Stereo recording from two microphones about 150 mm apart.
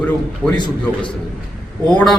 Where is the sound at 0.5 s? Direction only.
30° left (ahead or behind).